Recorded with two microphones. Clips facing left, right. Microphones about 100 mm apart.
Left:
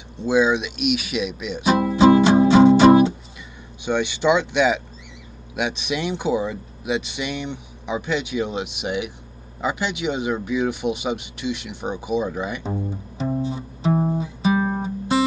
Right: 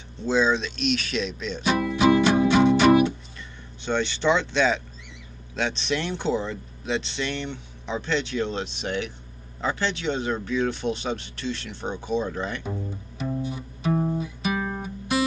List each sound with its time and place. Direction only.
0.2 s speech: 15° left (ahead or behind)
1.7 s music: 30° left (ahead or behind)
3.8 s speech: 15° left (ahead or behind)
13.2 s music: 30° left (ahead or behind)